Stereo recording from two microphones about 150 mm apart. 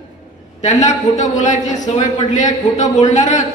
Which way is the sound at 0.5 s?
50° left (ahead or behind).